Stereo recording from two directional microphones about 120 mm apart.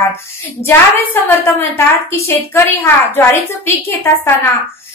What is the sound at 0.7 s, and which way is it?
A woman's voice, 20° left (ahead or behind).